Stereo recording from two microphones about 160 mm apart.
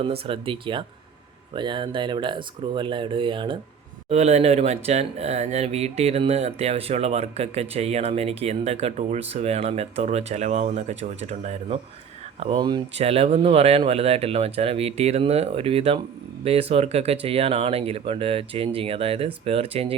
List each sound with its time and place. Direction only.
0.0 s speech: 35° right (ahead or behind)
4.1 s speech: 45° right (ahead or behind)